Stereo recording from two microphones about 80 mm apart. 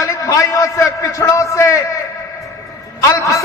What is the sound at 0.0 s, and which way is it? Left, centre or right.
A man's voice, left.